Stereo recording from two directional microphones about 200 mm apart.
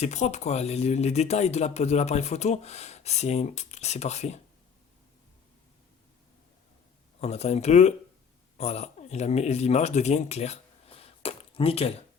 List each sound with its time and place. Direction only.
0.0 s speech: 35° left (ahead or behind)
7.2 s speech: 30° left (ahead or behind)